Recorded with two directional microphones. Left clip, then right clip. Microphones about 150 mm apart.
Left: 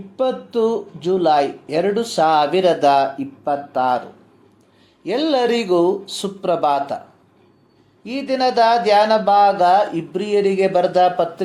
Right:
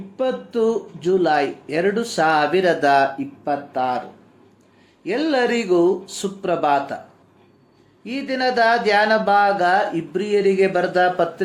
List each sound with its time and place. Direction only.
0.2 s speech: 30° left (ahead or behind)
5.0 s speech: 35° left (ahead or behind)
8.0 s speech: 30° left (ahead or behind)